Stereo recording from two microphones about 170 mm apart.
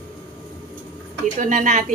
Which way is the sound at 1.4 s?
50° right (ahead or behind).